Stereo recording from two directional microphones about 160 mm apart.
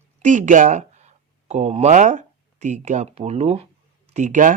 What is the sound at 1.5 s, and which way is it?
Speech, 40° right (ahead or behind).